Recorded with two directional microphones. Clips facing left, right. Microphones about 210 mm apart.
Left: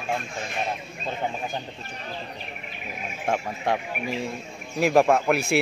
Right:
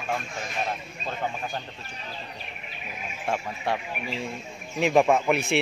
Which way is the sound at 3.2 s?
15° left (ahead or behind).